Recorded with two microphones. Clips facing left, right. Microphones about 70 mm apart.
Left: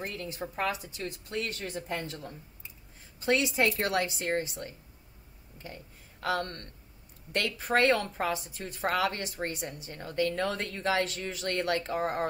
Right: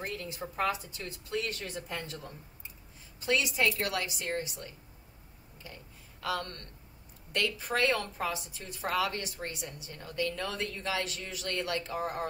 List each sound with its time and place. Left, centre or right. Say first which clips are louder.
0.0 s a woman's voice: left 1 dB; left
1.3 s a woman's voice: right 1 dB; left
3.2 s a woman's voice: left 3 dB; left
6.2 s a woman's voice: left 3 dB; left